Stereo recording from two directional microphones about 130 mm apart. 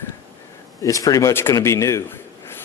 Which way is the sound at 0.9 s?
25° left (ahead or behind).